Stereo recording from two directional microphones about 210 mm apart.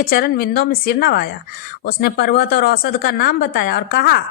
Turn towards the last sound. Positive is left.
turn(degrees=45)  # may be behind; listen again after turning